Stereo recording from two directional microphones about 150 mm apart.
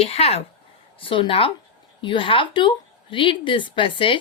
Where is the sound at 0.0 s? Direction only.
45° left (ahead or behind).